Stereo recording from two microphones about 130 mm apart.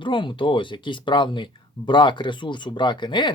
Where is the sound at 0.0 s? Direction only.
40° left (ahead or behind).